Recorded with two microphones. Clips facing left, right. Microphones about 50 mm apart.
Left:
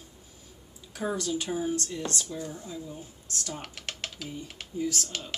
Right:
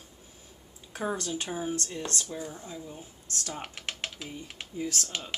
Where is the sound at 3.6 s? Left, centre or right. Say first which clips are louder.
Right 1 dB; right.